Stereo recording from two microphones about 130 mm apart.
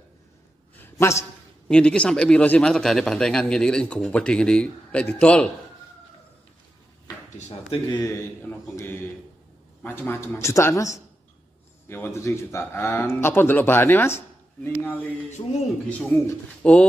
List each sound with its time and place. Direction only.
0.7 s a sound: 20° left (ahead or behind)
1.7 s speech: 5° left (ahead or behind)
7.3 s speech: 60° left (ahead or behind)
7.9 s speech: 25° left (ahead or behind)
15.4 s speech: 30° left (ahead or behind)
16.6 s speech: 10° left (ahead or behind)